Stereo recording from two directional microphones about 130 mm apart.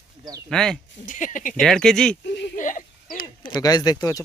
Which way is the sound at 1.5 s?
Centre (ahead or behind).